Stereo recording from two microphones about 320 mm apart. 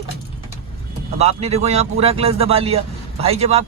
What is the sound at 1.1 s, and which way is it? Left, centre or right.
Speech, centre.